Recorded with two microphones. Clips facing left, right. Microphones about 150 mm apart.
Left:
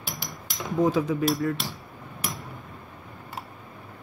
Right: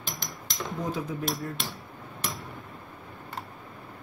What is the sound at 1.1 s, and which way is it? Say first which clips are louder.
Speech: left 8 dB; 90° left.